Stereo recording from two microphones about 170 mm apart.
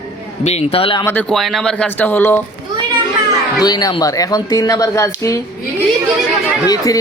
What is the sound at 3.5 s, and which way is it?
Speech, 25° left (ahead or behind).